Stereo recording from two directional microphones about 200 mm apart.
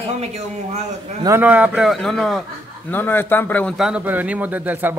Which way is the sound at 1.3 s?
10° right (ahead or behind).